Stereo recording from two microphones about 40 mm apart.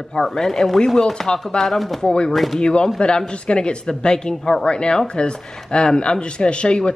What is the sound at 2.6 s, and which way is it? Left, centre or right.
A man's voice, left.